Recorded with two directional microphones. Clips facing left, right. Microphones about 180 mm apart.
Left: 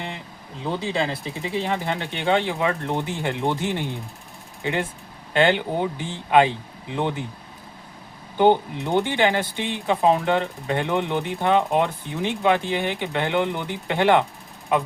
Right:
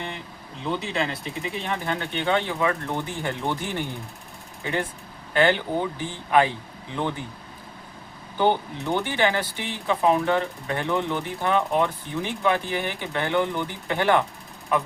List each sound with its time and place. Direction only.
0.7 s speech: 30° left (ahead or behind)
8.4 s speech: 15° left (ahead or behind)